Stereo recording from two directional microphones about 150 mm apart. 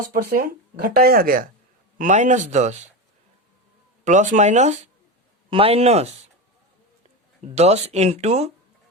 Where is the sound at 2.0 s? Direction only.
55° right (ahead or behind).